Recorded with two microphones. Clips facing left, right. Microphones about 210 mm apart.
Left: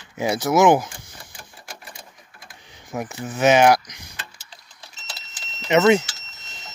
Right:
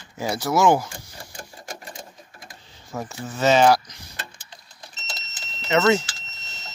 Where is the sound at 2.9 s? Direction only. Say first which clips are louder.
Left 3 dB; 15° left (ahead or behind).